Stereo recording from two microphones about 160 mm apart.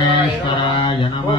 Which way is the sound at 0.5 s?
30° left (ahead or behind).